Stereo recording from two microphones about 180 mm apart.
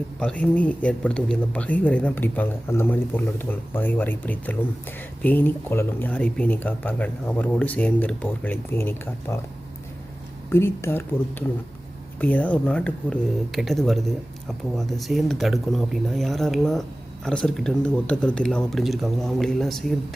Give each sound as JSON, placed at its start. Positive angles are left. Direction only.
{"t": 0.2, "sound": "speech", "side_deg": 5}
{"t": 10.5, "sound": "speech", "side_deg": 15}